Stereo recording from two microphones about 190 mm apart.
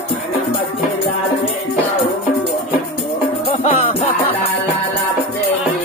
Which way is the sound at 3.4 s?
30° left (ahead or behind).